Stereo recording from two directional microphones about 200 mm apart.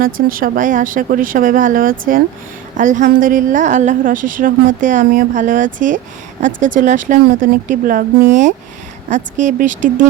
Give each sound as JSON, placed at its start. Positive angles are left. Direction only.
{"t": 0.0, "sound": "a woman's voice", "side_deg": -45}